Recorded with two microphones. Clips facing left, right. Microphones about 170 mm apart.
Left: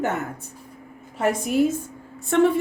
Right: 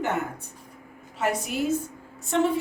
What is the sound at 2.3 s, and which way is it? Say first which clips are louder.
Speech: left 5 dB; 60° left (ahead or behind).